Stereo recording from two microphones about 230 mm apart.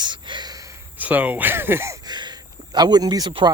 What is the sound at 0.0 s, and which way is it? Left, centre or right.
Speech, centre.